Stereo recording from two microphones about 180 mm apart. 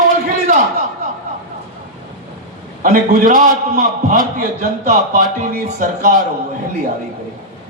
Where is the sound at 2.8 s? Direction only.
50° right (ahead or behind).